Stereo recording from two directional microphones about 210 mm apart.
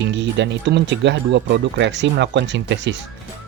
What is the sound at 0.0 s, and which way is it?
Speech, 55° right (ahead or behind).